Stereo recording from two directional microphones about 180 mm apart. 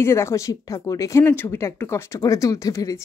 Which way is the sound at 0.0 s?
15° left (ahead or behind).